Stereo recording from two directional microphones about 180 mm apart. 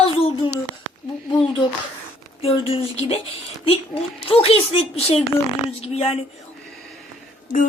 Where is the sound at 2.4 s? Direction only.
30° left (ahead or behind).